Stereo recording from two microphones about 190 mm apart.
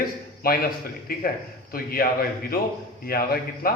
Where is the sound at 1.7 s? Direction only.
50° left (ahead or behind).